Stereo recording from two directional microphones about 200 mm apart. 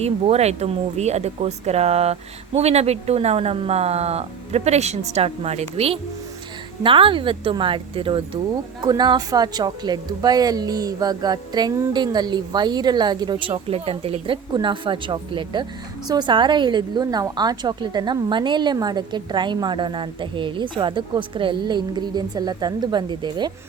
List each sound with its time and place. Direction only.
0.0 s a woman's voice: 30° right (ahead or behind)